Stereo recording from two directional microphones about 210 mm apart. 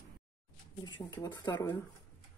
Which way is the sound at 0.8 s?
20° left (ahead or behind).